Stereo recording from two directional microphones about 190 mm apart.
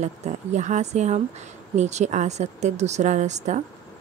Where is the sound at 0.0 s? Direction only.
35° right (ahead or behind).